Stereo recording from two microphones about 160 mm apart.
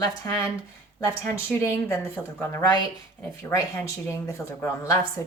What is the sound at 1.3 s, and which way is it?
Speech, 15° left (ahead or behind).